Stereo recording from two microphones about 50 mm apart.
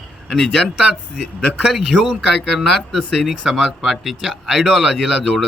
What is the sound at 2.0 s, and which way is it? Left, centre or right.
Speech, centre.